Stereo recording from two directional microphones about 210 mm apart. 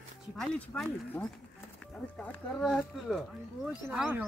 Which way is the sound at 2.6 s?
Centre (ahead or behind).